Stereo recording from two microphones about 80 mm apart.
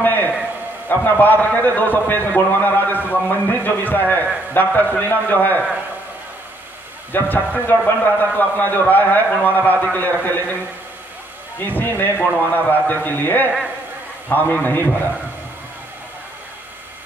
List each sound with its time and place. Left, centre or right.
0.0 s a sound: left
0.8 s a man's voice: left
7.1 s a man's voice: left
11.6 s a man's voice: left